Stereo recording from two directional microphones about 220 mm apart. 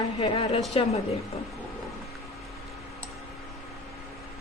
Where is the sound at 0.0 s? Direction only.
30° left (ahead or behind).